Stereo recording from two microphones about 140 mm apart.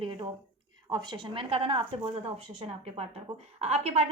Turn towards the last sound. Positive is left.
turn(degrees=-50)  # may be behind; listen again after turning